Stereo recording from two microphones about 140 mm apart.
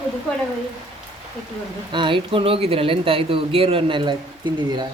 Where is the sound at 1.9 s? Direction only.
35° right (ahead or behind).